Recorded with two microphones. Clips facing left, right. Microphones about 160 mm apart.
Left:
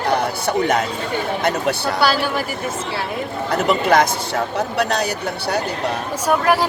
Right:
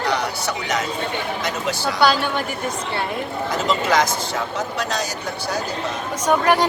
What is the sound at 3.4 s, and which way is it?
A man's voice, 60° left (ahead or behind).